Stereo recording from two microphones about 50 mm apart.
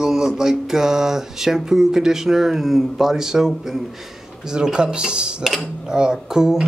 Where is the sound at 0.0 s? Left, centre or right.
Centre.